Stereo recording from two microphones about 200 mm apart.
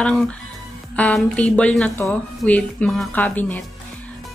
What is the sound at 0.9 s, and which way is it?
A woman's voice, 5° left (ahead or behind).